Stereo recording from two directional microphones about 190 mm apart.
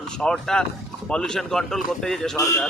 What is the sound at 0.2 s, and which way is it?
Speech, 5° left (ahead or behind).